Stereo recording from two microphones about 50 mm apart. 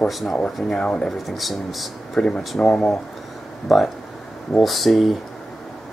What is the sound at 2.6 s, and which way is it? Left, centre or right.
Speech, left.